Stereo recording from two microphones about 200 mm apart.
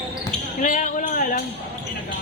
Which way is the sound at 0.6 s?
40° left (ahead or behind).